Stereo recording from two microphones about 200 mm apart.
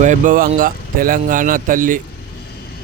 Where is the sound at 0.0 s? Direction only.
40° right (ahead or behind).